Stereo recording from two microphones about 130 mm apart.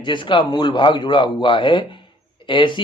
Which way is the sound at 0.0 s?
40° left (ahead or behind).